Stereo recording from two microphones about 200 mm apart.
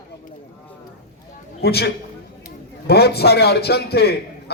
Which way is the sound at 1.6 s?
50° left (ahead or behind).